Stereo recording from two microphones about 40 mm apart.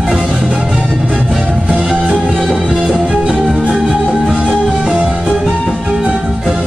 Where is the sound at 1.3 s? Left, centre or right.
Centre.